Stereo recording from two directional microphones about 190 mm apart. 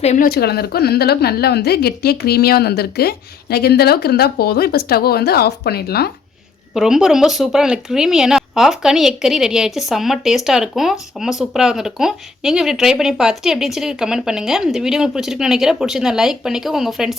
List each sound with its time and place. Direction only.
0.0 s speech: 35° left (ahead or behind)
0.3 s a woman's voice: 55° left (ahead or behind)
6.7 s speech: centre (ahead or behind)